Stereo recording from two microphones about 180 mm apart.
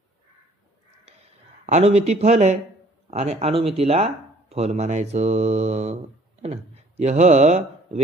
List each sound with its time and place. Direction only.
1.6 s speech: 35° right (ahead or behind)